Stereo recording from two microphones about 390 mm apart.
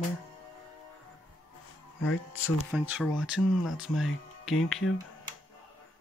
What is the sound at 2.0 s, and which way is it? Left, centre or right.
Speech, left.